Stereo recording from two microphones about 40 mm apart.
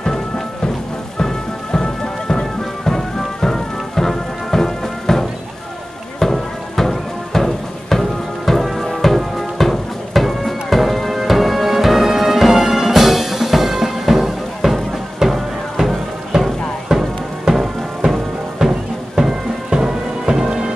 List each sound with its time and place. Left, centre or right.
1.1 s music: centre
2.8 s rain: centre
6.1 s music: centre; by 20.7 s right